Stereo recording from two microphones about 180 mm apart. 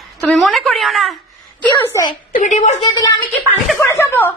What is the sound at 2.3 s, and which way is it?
Speech, 45° left (ahead or behind).